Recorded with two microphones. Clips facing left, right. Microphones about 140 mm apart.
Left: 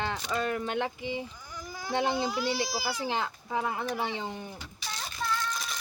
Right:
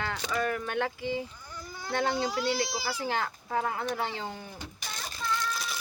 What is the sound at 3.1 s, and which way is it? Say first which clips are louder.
A woman's voice: even; 20° left (ahead or behind).